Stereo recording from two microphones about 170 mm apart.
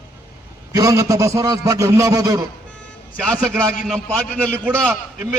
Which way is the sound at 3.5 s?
15° right (ahead or behind).